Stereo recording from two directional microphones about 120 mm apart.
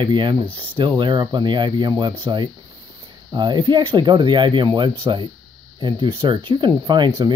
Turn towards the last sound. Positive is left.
turn(degrees=-40)  # may be behind; listen again after turning